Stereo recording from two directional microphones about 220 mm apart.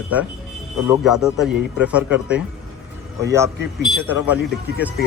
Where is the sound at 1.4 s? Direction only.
5° right (ahead or behind).